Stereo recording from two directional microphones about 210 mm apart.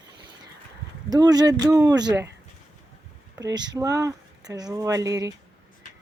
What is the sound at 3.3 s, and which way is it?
Speech, 15° right (ahead or behind).